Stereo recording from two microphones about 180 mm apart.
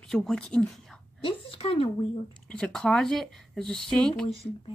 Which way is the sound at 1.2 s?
30° left (ahead or behind).